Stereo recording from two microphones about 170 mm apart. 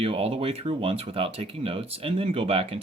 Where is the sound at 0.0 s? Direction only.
35° right (ahead or behind).